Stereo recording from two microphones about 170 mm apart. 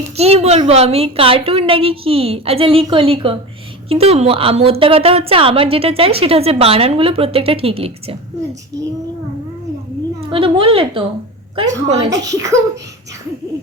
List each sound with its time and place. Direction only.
0.2 s a woman's voice: 40° right (ahead or behind)
10.2 s a woman's voice: 30° right (ahead or behind)
11.5 s speech: 20° right (ahead or behind)